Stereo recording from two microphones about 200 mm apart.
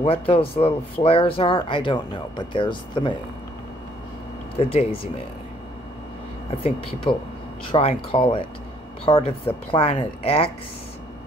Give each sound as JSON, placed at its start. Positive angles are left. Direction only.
{"t": 0.0, "sound": "speech", "side_deg": 30}
{"t": 4.6, "sound": "speech", "side_deg": 30}
{"t": 7.7, "sound": "speech", "side_deg": 25}